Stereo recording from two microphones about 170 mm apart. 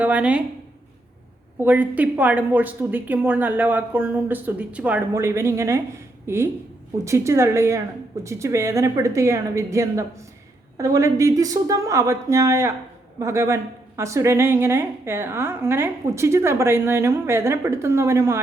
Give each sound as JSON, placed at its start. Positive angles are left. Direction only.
{"t": 0.0, "sound": "a woman's voice", "side_deg": -10}
{"t": 1.6, "sound": "a woman's voice", "side_deg": -10}